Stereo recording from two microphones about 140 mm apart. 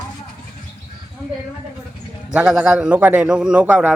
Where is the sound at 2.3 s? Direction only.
5° right (ahead or behind).